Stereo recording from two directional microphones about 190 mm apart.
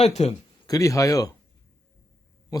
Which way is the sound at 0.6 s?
20° left (ahead or behind).